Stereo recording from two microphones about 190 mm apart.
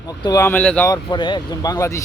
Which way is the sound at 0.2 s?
20° left (ahead or behind).